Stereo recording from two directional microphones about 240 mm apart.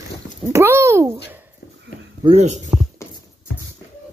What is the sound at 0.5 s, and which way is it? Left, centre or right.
Speech, centre.